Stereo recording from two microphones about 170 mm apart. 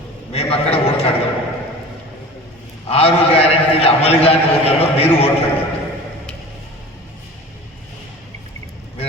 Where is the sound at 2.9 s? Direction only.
35° left (ahead or behind).